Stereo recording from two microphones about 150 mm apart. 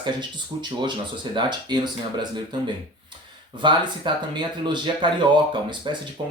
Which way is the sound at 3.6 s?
30° right (ahead or behind).